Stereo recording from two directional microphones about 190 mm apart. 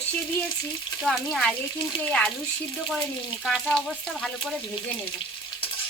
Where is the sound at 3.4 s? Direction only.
Centre (ahead or behind).